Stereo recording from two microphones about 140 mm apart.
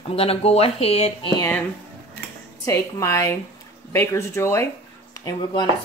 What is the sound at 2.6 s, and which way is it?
A woman's voice, 20° left (ahead or behind).